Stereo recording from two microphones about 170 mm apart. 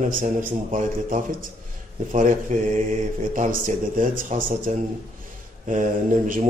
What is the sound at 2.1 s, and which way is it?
A man's voice, 50° right (ahead or behind).